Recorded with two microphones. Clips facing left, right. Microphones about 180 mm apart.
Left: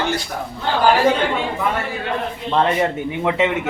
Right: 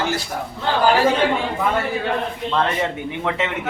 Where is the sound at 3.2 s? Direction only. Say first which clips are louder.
Left 5 dB; 15° left (ahead or behind).